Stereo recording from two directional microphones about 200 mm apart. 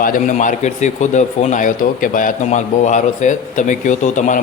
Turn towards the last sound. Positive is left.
turn(degrees=40)  # may be behind; listen again after turning